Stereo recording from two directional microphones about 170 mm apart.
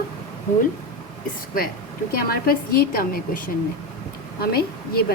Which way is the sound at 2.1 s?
65° left (ahead or behind).